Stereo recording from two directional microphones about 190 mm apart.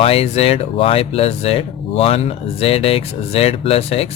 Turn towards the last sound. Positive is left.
turn(degrees=30)  # may be behind; listen again after turning